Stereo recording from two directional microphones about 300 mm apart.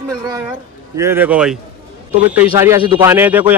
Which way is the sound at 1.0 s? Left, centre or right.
Centre.